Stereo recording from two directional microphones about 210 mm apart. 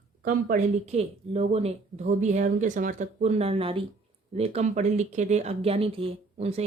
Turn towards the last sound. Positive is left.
turn(degrees=-30)  # may be behind; listen again after turning